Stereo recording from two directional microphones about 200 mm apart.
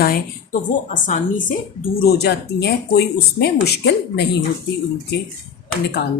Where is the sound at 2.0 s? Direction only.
50° left (ahead or behind).